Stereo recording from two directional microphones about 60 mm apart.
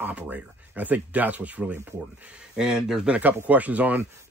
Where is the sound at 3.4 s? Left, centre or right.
Right.